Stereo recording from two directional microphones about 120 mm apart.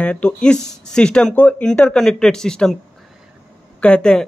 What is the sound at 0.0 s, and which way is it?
Speech, 10° left (ahead or behind).